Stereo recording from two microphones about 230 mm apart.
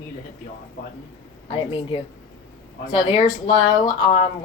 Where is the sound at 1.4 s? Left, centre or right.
Left.